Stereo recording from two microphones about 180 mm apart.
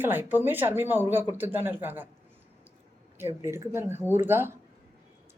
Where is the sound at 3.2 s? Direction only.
15° right (ahead or behind).